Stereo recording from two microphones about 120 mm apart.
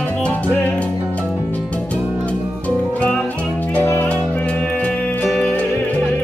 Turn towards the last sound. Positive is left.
turn(degrees=10)  # may be behind; listen again after turning